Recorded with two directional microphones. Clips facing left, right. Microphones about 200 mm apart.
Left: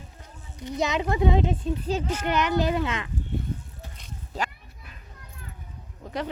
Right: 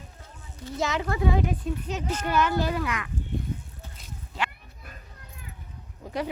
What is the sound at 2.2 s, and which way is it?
Speech, 20° left (ahead or behind).